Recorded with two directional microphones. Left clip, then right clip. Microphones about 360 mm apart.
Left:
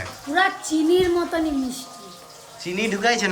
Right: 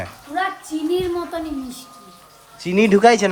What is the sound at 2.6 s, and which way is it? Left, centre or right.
Speech, centre.